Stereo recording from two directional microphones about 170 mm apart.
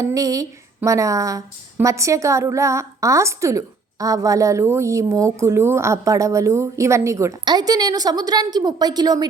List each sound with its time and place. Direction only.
0.0 s speech: 20° right (ahead or behind)